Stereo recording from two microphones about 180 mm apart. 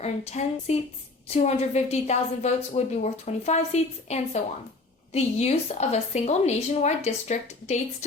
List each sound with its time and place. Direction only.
0.0 s a woman's voice: 35° left (ahead or behind)